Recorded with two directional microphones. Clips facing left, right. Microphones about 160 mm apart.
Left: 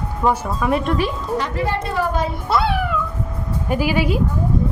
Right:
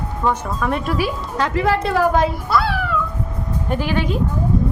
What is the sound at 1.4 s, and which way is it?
Speech, 90° right.